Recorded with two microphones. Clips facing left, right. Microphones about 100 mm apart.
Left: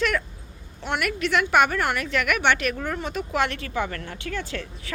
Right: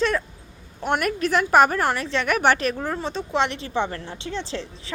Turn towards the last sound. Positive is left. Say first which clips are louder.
# right 2 dB
turn(degrees=-25)  # may be behind; listen again after turning